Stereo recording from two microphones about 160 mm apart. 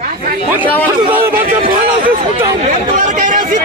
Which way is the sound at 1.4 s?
60° right (ahead or behind).